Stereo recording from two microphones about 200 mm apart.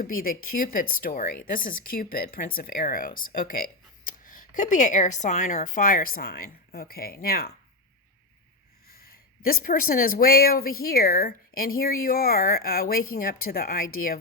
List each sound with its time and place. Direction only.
0.0 s a woman's voice: 45° left (ahead or behind)
8.9 s a sound: 50° left (ahead or behind)
9.6 s a woman's voice: 45° left (ahead or behind)